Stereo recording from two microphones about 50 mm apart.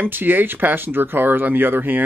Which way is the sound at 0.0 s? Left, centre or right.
Right.